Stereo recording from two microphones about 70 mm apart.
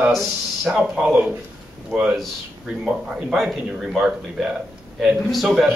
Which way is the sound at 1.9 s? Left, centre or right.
Centre.